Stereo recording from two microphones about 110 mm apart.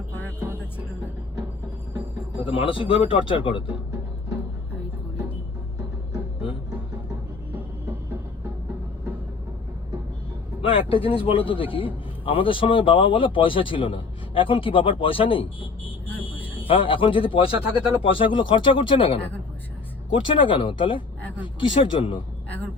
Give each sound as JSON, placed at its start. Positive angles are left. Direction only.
{"t": 2.0, "sound": "music", "side_deg": -10}
{"t": 2.5, "sound": "a man's voice", "side_deg": 55}
{"t": 10.6, "sound": "a man's voice", "side_deg": 55}
{"t": 16.0, "sound": "vehicle", "side_deg": 20}
{"t": 16.3, "sound": "speech", "side_deg": 55}
{"t": 17.5, "sound": "speech", "side_deg": -15}
{"t": 18.0, "sound": "a man's voice", "side_deg": 55}